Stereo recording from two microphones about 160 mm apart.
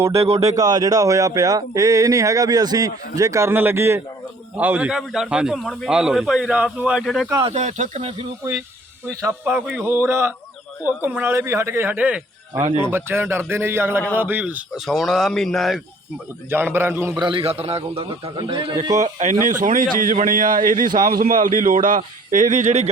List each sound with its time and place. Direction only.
0.2 s a man's voice: 40° right (ahead or behind)
0.4 s a man's voice: 20° right (ahead or behind); by 7.3 s 5° left (ahead or behind)
7.5 s speech: 50° right (ahead or behind)
9.0 s speech: 15° right (ahead or behind)
9.6 s a man's voice: 5° right (ahead or behind)
9.8 s a man's voice: 15° right (ahead or behind); by 15.8 s centre (ahead or behind)
16.5 s speech: 15° right (ahead or behind)
17.2 s a man's voice: 30° right (ahead or behind)
18.9 s a man's voice: 50° right (ahead or behind)